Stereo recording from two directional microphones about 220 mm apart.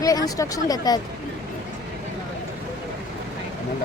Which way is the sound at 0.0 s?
15° left (ahead or behind).